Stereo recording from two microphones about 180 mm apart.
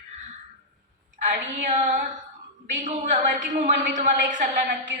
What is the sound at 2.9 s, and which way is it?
A woman's voice, 45° right (ahead or behind).